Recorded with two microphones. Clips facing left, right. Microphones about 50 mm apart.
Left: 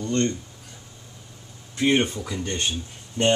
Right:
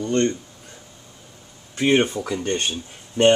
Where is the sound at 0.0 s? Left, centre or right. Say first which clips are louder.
Right 3 dB; right.